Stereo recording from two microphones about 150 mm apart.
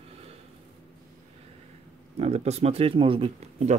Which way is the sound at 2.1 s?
45° right (ahead or behind).